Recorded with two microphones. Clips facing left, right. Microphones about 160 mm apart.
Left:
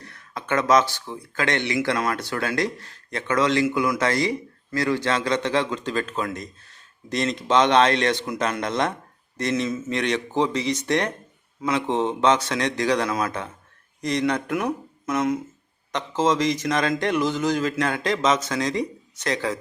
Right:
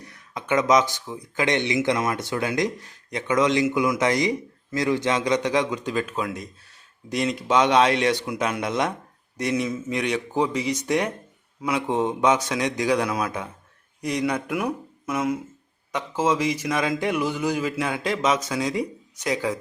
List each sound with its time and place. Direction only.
0.0 s speech: 15° right (ahead or behind)